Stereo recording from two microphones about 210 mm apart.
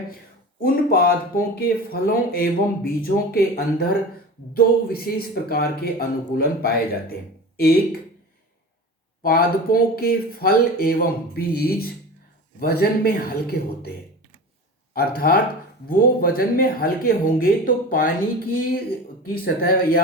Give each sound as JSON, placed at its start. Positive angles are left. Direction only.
{"t": 0.6, "sound": "speech", "side_deg": 45}
{"t": 9.2, "sound": "speech", "side_deg": 45}
{"t": 14.9, "sound": "speech", "side_deg": 45}
{"t": 19.5, "sound": "speech", "side_deg": 45}